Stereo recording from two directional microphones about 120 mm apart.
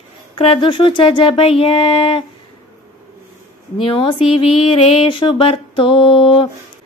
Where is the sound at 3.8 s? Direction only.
50° left (ahead or behind).